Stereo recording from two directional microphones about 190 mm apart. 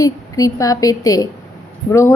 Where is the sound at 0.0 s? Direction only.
20° left (ahead or behind).